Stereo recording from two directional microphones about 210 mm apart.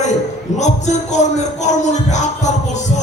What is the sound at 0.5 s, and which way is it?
Speech, 35° left (ahead or behind).